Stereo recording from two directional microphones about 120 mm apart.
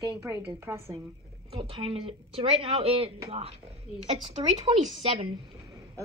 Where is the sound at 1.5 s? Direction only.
50° right (ahead or behind).